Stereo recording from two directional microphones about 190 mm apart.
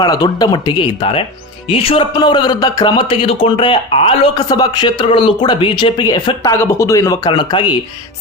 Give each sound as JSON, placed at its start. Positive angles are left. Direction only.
{"t": 0.0, "sound": "a man's voice", "side_deg": 20}